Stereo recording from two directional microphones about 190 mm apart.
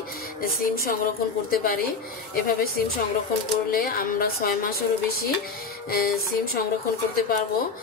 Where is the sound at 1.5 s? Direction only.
50° left (ahead or behind).